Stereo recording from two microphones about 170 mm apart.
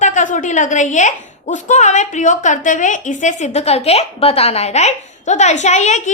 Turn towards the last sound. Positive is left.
turn(degrees=40)  # may be behind; listen again after turning